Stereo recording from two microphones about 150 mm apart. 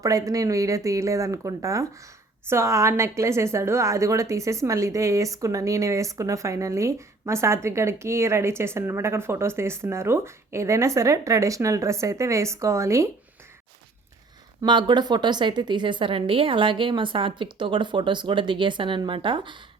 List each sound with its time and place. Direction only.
0.0 s a woman's voice: 20° right (ahead or behind)
14.6 s a woman's voice: 30° right (ahead or behind)